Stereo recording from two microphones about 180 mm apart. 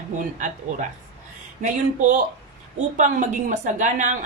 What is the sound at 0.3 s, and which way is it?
A woman's voice, 45° right (ahead or behind).